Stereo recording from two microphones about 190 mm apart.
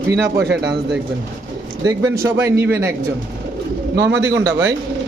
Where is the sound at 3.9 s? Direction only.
65° right (ahead or behind).